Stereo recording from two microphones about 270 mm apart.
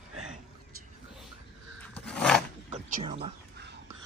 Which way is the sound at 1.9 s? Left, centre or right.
Centre.